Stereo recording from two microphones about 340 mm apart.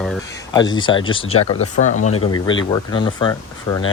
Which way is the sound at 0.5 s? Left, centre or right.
Centre.